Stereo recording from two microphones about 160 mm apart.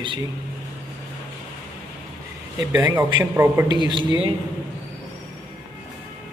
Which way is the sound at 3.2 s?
15° right (ahead or behind).